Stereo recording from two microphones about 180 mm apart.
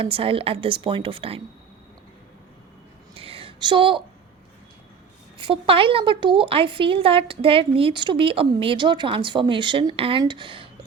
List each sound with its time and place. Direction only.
0.0 s a woman's voice: 30° right (ahead or behind)
3.2 s a sound: 30° right (ahead or behind)
5.4 s speech: 30° right (ahead or behind)